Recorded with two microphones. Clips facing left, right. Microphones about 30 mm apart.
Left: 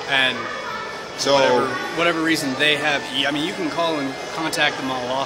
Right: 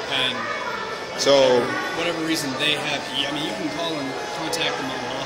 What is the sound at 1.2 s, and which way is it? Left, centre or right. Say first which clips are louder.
Speech: even; centre.